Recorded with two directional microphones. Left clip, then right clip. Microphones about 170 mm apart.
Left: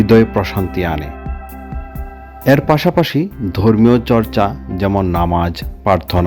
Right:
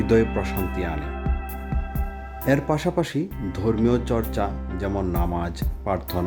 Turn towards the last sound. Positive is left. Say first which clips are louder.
# left 12 dB
turn(degrees=30)  # may be behind; listen again after turning